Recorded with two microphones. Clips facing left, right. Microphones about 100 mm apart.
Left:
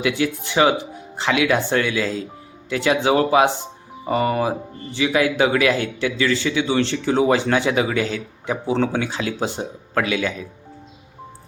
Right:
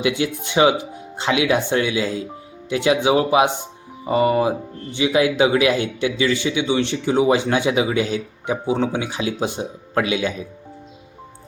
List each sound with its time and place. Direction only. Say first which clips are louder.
0.0 s speech: even; 20° right (ahead or behind)